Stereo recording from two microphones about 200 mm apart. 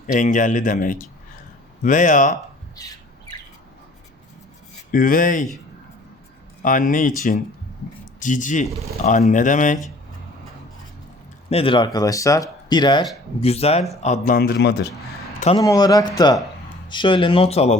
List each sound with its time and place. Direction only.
0.1 s speech: 40° left (ahead or behind)
2.7 s squawk: 20° left (ahead or behind)
4.9 s a man's voice: 45° left (ahead or behind)
6.6 s speech: 40° left (ahead or behind)
8.2 s speech: 40° left (ahead or behind)
11.4 s a man's voice: 30° left (ahead or behind); by 14.8 s 55° left (ahead or behind)
15.5 s speech: 20° left (ahead or behind)